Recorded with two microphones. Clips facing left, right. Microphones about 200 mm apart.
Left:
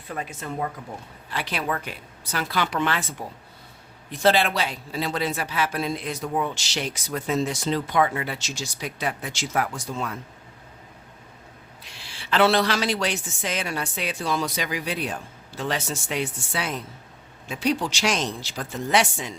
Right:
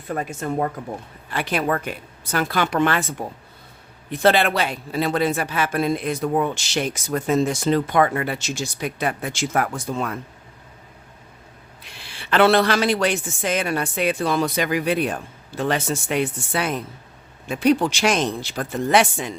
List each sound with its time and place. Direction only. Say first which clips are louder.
0.1 s speech: right 7 dB; 45° right (ahead or behind)
11.8 s a woman's voice: right 4 dB; 55° right (ahead or behind)